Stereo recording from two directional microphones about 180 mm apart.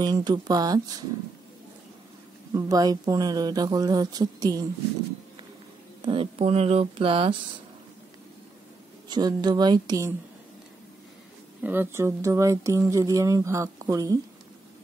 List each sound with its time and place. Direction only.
0.0 s speech: 25° right (ahead or behind)
2.5 s speech: 20° right (ahead or behind)
6.0 s speech: 35° right (ahead or behind)
9.1 s speech: 20° right (ahead or behind)
11.6 s speech: 10° right (ahead or behind)